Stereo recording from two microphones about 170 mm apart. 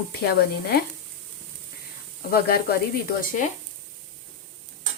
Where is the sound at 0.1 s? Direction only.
65° left (ahead or behind).